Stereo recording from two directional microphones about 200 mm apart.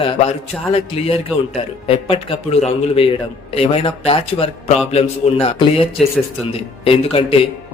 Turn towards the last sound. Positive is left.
turn(degrees=25)  # may be behind; listen again after turning